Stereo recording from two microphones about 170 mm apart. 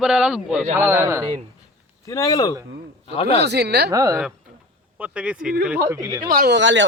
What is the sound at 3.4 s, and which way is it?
Speech, 75° right (ahead or behind).